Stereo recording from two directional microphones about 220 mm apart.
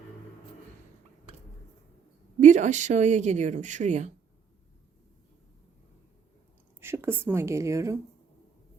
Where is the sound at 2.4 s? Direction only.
35° right (ahead or behind).